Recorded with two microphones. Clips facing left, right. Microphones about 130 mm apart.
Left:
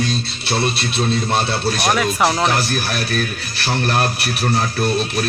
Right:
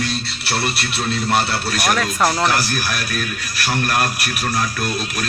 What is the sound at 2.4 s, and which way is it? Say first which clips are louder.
A man's voice: left 1 dB; 25° left (ahead or behind).